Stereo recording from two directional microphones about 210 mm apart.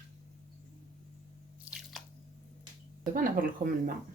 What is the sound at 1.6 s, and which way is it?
Drip, centre (ahead or behind).